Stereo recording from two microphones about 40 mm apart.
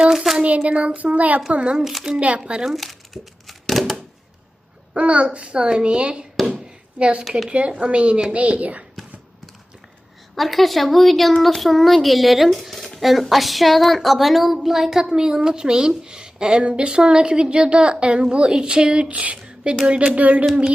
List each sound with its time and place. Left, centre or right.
0.0 s child singing: centre
0.4 s child singing: right
1.5 s a woman's voice: right
1.8 s a woman's voice: centre
2.1 s child singing: right
2.4 s a woman's voice: right
2.6 s crumpling: centre
4.9 s a woman's voice: right
6.4 s a sound: right
7.8 s child singing: right
10.3 s a woman's voice: centre
15.0 s a woman's voice: centre
20.1 s child singing: right